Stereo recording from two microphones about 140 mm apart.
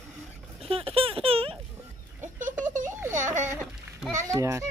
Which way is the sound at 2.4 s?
65° right (ahead or behind).